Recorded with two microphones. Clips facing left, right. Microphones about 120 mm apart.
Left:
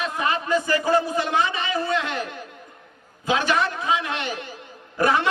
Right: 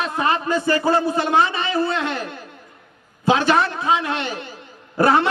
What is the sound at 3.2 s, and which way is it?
A man's voice, 30° right (ahead or behind).